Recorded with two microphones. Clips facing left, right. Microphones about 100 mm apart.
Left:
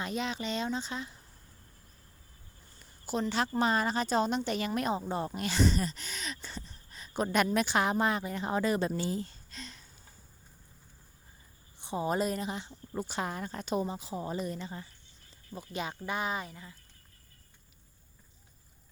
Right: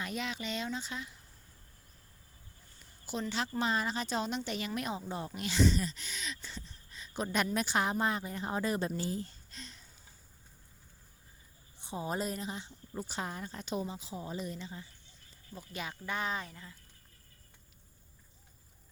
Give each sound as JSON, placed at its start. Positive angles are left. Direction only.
{"t": 0.0, "sound": "speech", "side_deg": 30}
{"t": 3.1, "sound": "a woman's voice", "side_deg": 45}
{"t": 7.5, "sound": "speech", "side_deg": 75}
{"t": 11.8, "sound": "a woman's voice", "side_deg": 65}
{"t": 15.5, "sound": "speech", "side_deg": 25}